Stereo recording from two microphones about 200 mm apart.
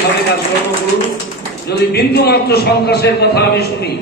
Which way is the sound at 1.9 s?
50° left (ahead or behind).